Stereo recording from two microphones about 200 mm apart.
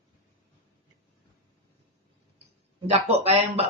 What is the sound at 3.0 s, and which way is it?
Speech, 30° right (ahead or behind).